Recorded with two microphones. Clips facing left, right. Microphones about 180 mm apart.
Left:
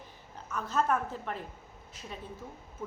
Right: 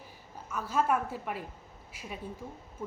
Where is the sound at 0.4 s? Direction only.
10° right (ahead or behind).